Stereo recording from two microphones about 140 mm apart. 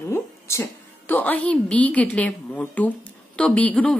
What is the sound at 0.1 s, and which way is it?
A woman's voice, 20° left (ahead or behind).